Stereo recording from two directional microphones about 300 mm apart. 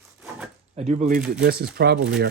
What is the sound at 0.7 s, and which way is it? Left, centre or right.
Speech, right.